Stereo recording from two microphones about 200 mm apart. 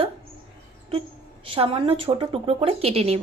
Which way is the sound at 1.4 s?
30° right (ahead or behind).